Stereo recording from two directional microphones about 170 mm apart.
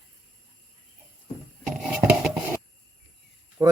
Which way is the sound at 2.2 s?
5° right (ahead or behind).